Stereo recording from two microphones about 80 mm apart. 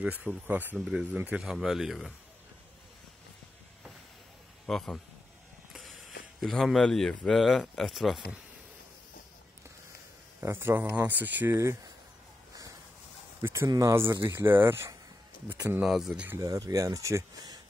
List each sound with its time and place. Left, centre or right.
0.0 s speech: centre
0.7 s speech: centre
1.1 s speech: right
1.4 s speech: centre
4.6 s speech: centre
5.7 s mechanisms: centre
6.4 s speech: centre
10.4 s speech: right
13.4 s speech: right
13.7 s speech: right
14.2 s speech: right
15.8 s speech: centre
16.3 s speech: right